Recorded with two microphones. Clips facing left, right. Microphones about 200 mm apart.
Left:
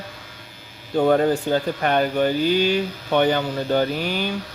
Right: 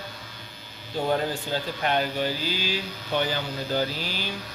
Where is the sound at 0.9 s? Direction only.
65° left (ahead or behind).